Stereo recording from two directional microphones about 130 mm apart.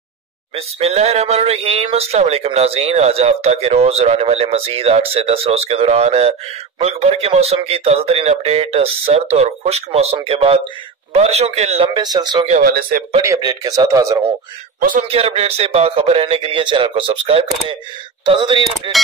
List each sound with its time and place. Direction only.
0.6 s speech: 50° right (ahead or behind)
11.9 s speech: 30° right (ahead or behind)
12.4 s speech: 65° right (ahead or behind)
13.2 s a man's voice: 25° right (ahead or behind)
14.8 s a man's voice: 90° right
15.0 s speech: 50° right (ahead or behind)